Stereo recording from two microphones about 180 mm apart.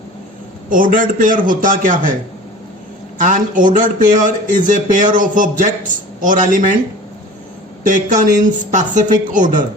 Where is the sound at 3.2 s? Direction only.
45° right (ahead or behind).